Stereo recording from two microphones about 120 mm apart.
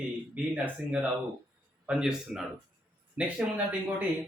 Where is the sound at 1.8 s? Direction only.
5° right (ahead or behind).